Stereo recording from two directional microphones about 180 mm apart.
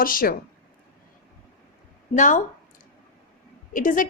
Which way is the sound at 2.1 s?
45° left (ahead or behind).